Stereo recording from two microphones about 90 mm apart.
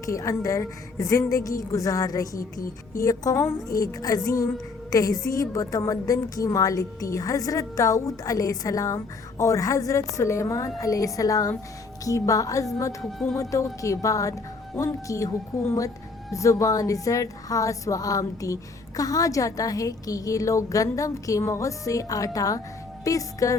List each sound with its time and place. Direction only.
0.0 s a woman's voice: 35° left (ahead or behind)